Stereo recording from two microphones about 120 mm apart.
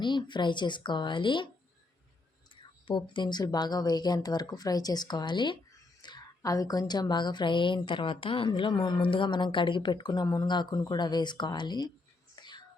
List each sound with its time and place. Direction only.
0.0 s a woman's voice: 40° left (ahead or behind)
2.6 s a woman's voice: 40° left (ahead or behind)
12.4 s whispering: 40° left (ahead or behind)